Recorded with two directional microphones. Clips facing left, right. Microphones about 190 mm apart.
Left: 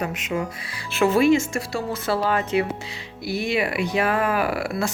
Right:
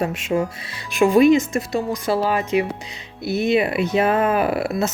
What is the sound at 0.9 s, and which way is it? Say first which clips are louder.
Speech: right 4 dB; 15° right (ahead or behind).